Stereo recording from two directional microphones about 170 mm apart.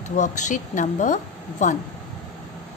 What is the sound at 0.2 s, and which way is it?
A woman's voice, 45° left (ahead or behind).